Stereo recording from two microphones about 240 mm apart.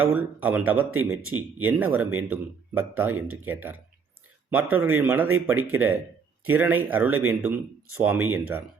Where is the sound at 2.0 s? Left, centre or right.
Right.